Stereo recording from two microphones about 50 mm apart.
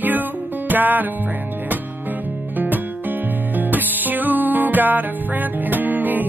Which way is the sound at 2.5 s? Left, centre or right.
Right.